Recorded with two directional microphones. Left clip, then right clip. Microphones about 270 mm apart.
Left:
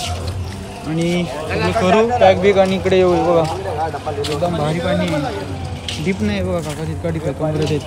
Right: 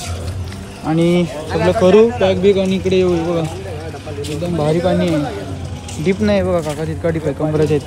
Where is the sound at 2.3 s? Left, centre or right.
Centre.